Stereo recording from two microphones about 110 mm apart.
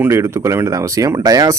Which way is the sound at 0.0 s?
25° right (ahead or behind).